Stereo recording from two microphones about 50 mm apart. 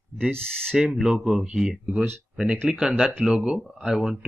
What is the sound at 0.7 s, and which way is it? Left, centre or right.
Speech, centre.